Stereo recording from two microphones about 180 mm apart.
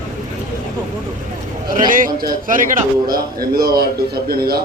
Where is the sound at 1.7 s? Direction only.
50° right (ahead or behind).